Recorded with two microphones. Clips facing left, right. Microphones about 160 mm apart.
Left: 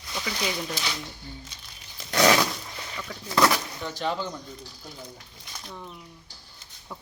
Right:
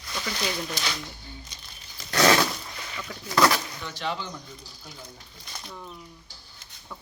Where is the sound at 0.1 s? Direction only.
10° left (ahead or behind).